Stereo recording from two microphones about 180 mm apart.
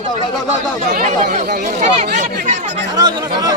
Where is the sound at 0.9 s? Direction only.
50° right (ahead or behind).